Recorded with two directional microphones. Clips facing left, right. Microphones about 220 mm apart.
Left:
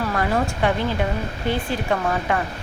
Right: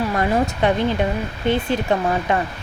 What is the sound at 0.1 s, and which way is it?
Speech, 20° right (ahead or behind).